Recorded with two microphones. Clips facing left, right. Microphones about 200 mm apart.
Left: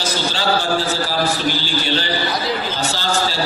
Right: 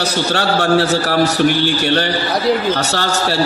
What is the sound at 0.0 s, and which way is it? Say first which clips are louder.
A man's voice: right 4 dB; 70° right (ahead or behind).